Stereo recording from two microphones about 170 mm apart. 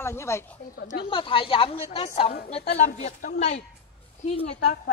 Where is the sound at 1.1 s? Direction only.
30° left (ahead or behind).